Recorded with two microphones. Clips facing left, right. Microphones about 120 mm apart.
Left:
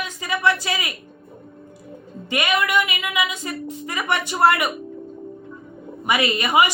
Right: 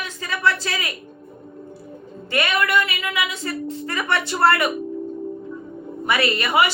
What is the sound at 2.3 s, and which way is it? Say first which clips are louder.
Speech: even; 15° left (ahead or behind).